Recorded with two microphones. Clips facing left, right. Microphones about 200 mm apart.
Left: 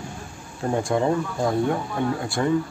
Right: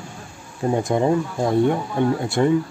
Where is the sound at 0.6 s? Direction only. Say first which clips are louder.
Right 3 dB; 20° right (ahead or behind).